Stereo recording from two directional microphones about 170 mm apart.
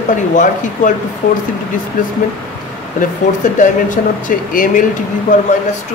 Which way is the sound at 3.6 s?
50° left (ahead or behind).